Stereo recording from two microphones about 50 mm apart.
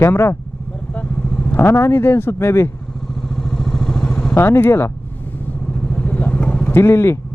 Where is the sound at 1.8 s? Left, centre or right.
Left.